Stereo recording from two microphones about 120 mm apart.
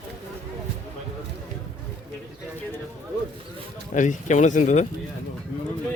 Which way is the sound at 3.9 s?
90° left.